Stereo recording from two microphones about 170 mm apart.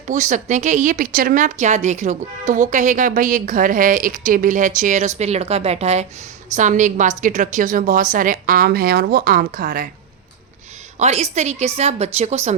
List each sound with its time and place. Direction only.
0.1 s a woman's voice: 45° right (ahead or behind)
11.0 s a woman's voice: 40° right (ahead or behind)